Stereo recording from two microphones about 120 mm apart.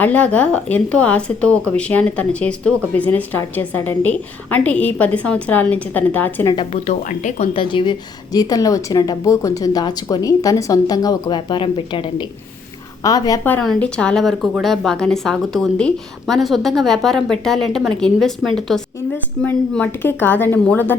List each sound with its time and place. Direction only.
0.0 s speech: 10° left (ahead or behind)
6.4 s a woman's voice: 35° left (ahead or behind)
6.8 s a woman's voice: 80° left; by 12.2 s 45° left (ahead or behind)
13.0 s a woman's voice: 30° left (ahead or behind)
13.4 s a woman's voice: 15° left (ahead or behind)